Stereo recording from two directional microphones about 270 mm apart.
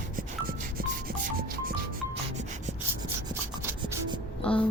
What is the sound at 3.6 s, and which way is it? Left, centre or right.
Rub, centre.